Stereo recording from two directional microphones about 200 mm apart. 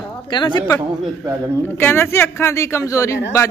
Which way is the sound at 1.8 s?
10° left (ahead or behind).